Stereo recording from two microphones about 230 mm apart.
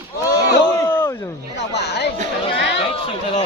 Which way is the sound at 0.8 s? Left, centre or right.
Centre.